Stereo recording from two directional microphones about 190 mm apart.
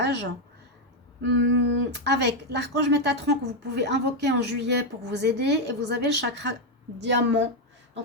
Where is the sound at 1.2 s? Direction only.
65° right (ahead or behind).